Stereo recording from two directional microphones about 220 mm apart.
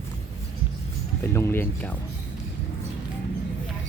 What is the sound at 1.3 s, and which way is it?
Speech, 10° left (ahead or behind).